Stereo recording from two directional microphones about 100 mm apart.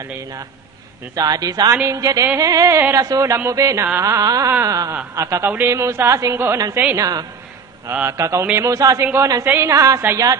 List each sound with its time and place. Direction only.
1.1 s a woman's voice: 35° right (ahead or behind)
1.7 s a woman's voice: 30° right (ahead or behind)
9.0 s a woman's voice: 25° right (ahead or behind)